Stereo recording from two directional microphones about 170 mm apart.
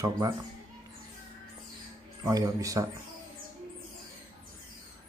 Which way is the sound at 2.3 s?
20° right (ahead or behind).